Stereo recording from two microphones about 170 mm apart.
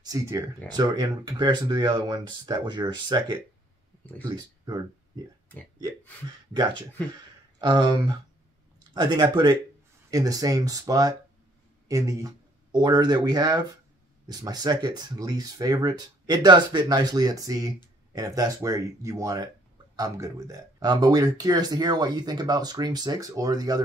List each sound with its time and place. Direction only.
0.0 s speech: 20° right (ahead or behind)
7.6 s speech: 25° right (ahead or behind)